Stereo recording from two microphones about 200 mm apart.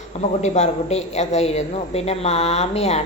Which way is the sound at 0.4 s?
35° left (ahead or behind).